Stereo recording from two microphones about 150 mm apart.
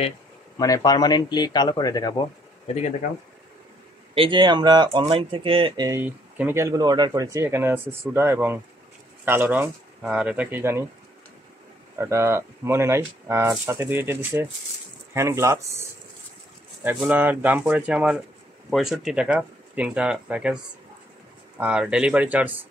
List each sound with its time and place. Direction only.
0.6 s speech: 25° left (ahead or behind)
4.1 s speech: 35° right (ahead or behind)
5.8 s speech: 20° right (ahead or behind)
12.0 s speech: 20° right (ahead or behind)
17.0 s speech: 10° right (ahead or behind)
21.5 s speech: 5° right (ahead or behind)